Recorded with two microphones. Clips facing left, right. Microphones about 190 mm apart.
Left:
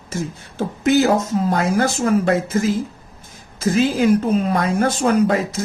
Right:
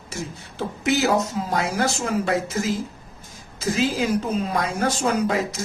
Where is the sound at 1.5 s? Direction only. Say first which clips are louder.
Left 6 dB; 55° left (ahead or behind).